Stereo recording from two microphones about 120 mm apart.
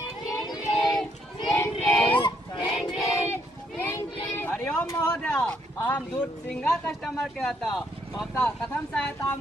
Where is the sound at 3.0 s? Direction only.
20° left (ahead or behind).